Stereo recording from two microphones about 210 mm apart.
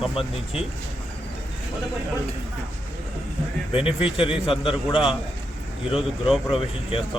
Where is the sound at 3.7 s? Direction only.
25° left (ahead or behind).